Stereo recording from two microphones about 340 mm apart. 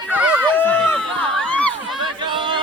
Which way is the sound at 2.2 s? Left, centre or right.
Centre.